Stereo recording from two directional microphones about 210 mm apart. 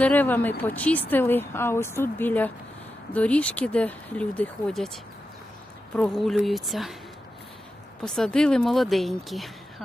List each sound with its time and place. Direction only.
0.0 s speech: 10° left (ahead or behind)
6.0 s speech: centre (ahead or behind)
8.0 s speech: 5° left (ahead or behind)